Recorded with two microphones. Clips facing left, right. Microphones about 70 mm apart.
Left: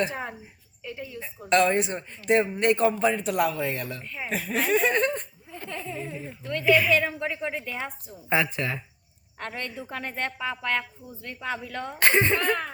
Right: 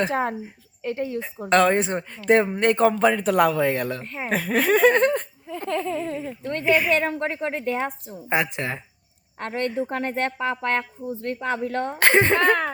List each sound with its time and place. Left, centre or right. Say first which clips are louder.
0.0 s speech: right 6 dB; right
1.5 s speech: right 3 dB; right
2.8 s speech: right 4 dB; right
5.6 s a sound: right 9 dB; right
6.4 s speech: even; right
8.3 s speech: right 1 dB; right
9.6 s speech: right 12 dB; right
12.0 s speech: right 4 dB; right
12.4 s speech: right 7 dB; right